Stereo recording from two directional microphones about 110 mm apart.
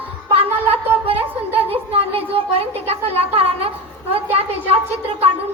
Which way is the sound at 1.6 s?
60° right (ahead or behind).